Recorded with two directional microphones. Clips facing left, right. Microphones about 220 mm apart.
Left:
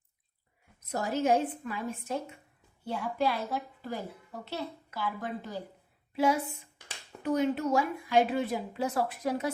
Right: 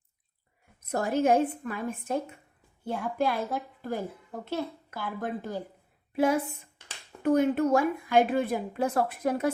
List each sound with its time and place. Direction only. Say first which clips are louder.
0.9 s a woman's voice: right 3 dB; 55° right (ahead or behind)